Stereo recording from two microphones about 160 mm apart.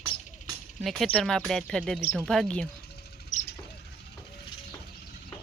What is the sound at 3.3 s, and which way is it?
Rodents, 50° left (ahead or behind).